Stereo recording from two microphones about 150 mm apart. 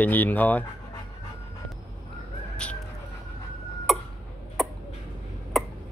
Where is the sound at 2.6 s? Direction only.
5° left (ahead or behind).